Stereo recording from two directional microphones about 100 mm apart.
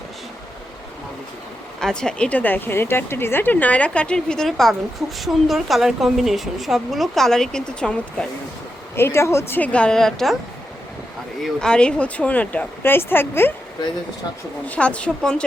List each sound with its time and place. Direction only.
1.8 s speech: 10° left (ahead or behind)
9.0 s a woman's voice: 25° left (ahead or behind)
9.7 s speech: 10° left (ahead or behind)
11.4 s speech: 5° left (ahead or behind)
14.7 s speech: 10° left (ahead or behind)